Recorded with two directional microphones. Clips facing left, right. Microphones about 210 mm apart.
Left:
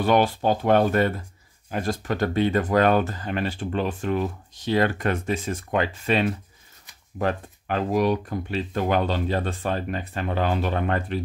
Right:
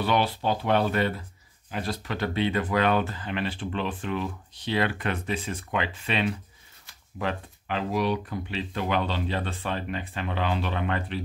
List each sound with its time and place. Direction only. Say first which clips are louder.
0.0 s speech: left 5 dB; 45° left (ahead or behind)